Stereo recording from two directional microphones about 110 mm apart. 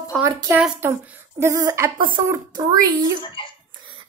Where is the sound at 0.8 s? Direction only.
25° right (ahead or behind).